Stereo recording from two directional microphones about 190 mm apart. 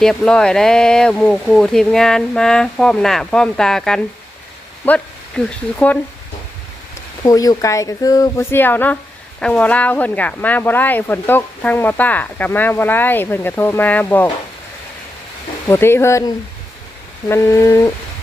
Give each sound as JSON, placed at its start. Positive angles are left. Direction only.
{"t": 0.0, "sound": "speech", "side_deg": 5}
{"t": 7.3, "sound": "speech", "side_deg": 20}
{"t": 15.6, "sound": "speech", "side_deg": 10}